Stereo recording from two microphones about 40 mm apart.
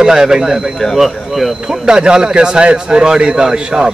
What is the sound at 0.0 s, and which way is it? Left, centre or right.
A man's voice, centre.